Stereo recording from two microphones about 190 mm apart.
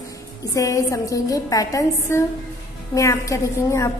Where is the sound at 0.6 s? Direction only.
15° left (ahead or behind).